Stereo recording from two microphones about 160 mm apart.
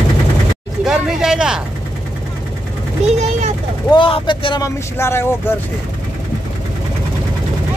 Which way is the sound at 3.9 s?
30° left (ahead or behind).